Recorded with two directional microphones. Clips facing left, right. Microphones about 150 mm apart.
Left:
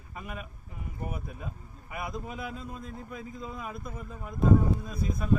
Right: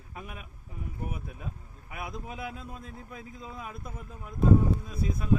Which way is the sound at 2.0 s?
5° right (ahead or behind).